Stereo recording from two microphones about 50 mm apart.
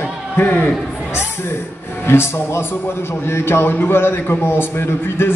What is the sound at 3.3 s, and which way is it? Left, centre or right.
A man's voice, left.